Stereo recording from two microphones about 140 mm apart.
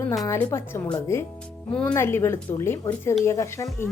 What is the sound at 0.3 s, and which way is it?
Speech, 15° left (ahead or behind).